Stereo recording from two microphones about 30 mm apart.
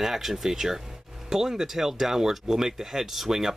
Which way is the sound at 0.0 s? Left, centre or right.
Centre.